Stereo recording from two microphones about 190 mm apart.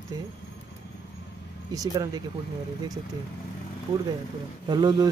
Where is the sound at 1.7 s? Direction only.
20° right (ahead or behind).